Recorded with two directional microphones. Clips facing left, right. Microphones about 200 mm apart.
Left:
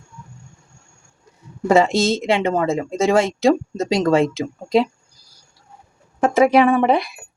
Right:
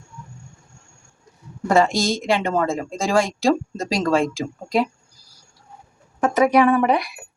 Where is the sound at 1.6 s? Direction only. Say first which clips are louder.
Left 3 dB; 20° left (ahead or behind).